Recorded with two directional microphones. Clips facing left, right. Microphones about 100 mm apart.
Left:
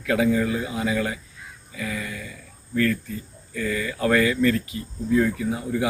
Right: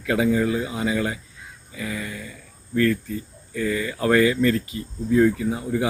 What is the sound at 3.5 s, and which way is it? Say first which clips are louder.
Speech: right 2 dB; 20° right (ahead or behind).